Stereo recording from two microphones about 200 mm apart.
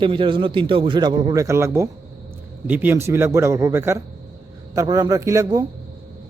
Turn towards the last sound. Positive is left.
turn(degrees=-15)  # may be behind; listen again after turning